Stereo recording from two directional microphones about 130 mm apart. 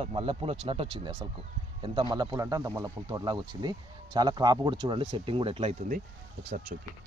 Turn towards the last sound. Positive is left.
turn(degrees=-90)